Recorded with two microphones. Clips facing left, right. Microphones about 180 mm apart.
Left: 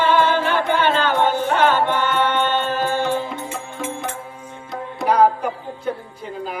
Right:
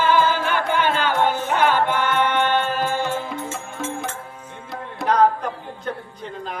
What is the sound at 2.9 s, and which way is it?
Music, 15° left (ahead or behind).